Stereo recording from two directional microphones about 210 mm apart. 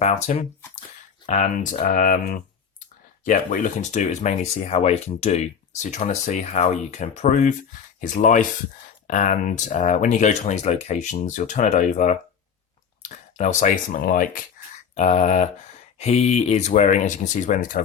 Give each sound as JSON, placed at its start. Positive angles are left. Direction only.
{"t": 0.0, "sound": "speech", "side_deg": 30}